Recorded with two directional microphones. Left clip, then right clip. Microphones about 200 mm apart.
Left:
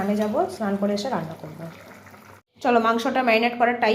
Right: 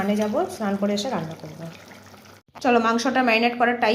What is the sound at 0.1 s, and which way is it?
A woman's voice, 5° right (ahead or behind).